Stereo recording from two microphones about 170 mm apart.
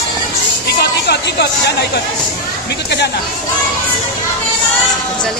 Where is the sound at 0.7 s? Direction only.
75° left (ahead or behind).